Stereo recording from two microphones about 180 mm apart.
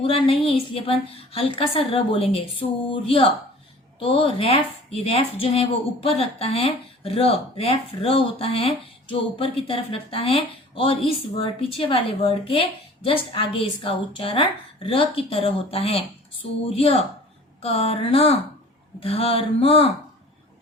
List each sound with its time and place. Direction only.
0.0 s speech: 30° left (ahead or behind)